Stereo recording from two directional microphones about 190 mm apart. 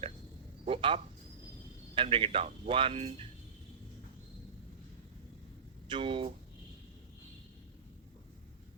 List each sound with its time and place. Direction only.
0.6 s speech: 30° right (ahead or behind)
5.9 s speech: 25° right (ahead or behind)